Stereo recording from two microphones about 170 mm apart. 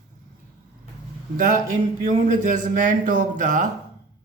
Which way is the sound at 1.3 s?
50° right (ahead or behind).